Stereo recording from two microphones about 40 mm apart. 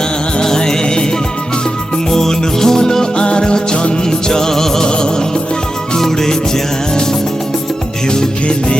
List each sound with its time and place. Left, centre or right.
0.3 s music: centre
2.1 s music: centre
6.0 s music: centre
8.1 s music: left